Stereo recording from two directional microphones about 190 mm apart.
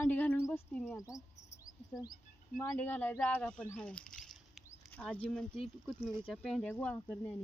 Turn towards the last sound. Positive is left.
turn(degrees=5)  # may be behind; listen again after turning